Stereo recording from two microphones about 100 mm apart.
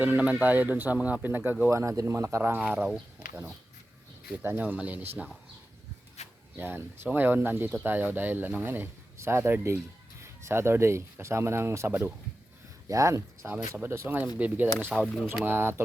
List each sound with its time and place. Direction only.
0.0 s speech: 15° right (ahead or behind)
1.7 s speech: 30° right (ahead or behind); by 3.0 s 10° right (ahead or behind)
4.3 s speech: 20° right (ahead or behind)
6.2 s a sound: 90° left
6.6 s speech: 20° right (ahead or behind)
13.5 s speech: 20° right (ahead or behind)